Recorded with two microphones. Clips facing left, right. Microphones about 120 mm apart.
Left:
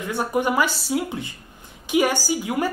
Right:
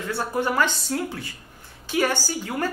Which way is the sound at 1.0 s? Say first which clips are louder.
Left 2 dB; 20° left (ahead or behind).